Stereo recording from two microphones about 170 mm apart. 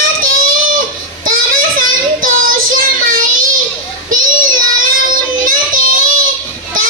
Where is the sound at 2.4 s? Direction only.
55° right (ahead or behind).